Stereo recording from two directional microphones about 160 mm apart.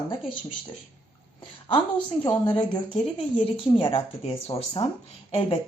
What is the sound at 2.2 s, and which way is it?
A woman's voice, 30° left (ahead or behind).